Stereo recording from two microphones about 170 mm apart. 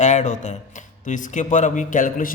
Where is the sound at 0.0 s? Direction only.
45° left (ahead or behind).